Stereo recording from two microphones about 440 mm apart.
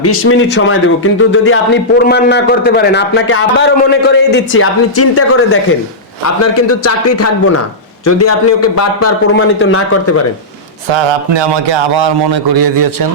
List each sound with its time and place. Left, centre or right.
0.0 s a man's voice: left
10.8 s speech: right